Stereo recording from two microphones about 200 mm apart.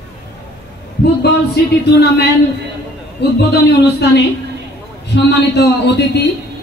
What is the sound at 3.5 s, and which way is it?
Speech, 55° left (ahead or behind).